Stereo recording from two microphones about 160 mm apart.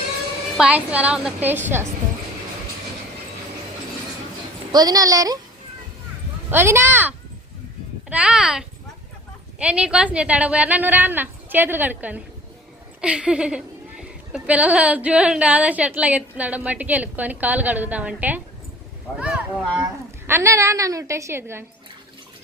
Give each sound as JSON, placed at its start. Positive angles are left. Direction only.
{"t": 0.5, "sound": "a woman's voice", "side_deg": -5}
{"t": 4.7, "sound": "a woman's voice", "side_deg": -25}
{"t": 6.5, "sound": "a woman's voice", "side_deg": -15}
{"t": 8.1, "sound": "a woman's voice", "side_deg": -5}
{"t": 20.2, "sound": "a woman's voice", "side_deg": -15}